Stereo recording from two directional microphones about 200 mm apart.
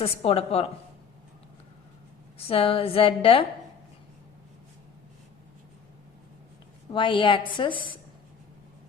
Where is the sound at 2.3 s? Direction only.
30° left (ahead or behind).